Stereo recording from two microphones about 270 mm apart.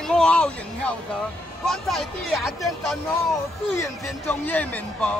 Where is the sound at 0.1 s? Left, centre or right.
Centre.